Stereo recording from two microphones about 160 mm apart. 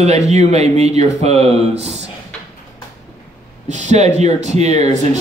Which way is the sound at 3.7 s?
45° right (ahead or behind).